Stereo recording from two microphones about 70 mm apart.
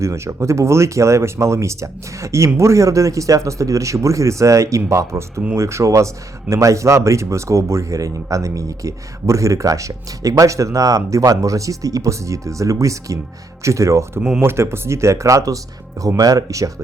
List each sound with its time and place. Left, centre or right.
0.0 s speech: right
14.2 s speech: centre
14.4 s speech: right